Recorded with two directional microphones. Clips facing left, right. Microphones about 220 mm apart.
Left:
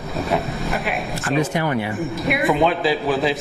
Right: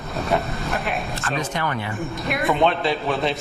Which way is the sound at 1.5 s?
15° left (ahead or behind).